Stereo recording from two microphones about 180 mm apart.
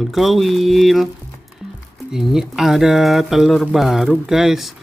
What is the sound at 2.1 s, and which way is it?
Speech, centre (ahead or behind).